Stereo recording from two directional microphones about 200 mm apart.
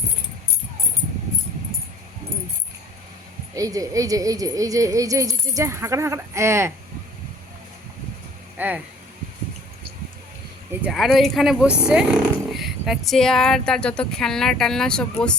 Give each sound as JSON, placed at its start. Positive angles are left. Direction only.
{"t": 3.5, "sound": "a woman's voice", "side_deg": -15}
{"t": 8.5, "sound": "speech", "side_deg": -10}
{"t": 10.8, "sound": "speech", "side_deg": 0}